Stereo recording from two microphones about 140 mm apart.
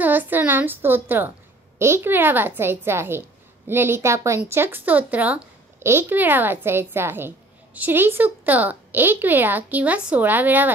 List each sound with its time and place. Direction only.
0.0 s a woman's voice: 15° right (ahead or behind)